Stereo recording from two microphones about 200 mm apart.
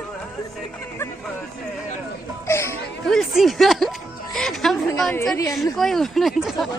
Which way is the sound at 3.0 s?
Centre (ahead or behind).